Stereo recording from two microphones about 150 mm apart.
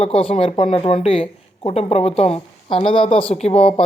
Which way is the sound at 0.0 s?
40° left (ahead or behind).